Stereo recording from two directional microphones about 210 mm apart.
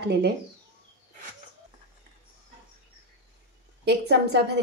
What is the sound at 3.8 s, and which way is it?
Speech, 55° right (ahead or behind).